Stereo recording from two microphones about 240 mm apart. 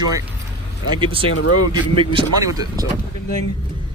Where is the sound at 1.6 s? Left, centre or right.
Centre.